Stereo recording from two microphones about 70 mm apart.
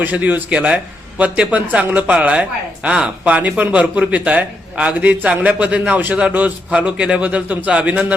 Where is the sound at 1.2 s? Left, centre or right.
Centre.